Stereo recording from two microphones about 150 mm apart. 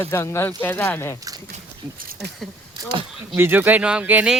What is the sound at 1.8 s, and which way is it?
Speech, 15° right (ahead or behind).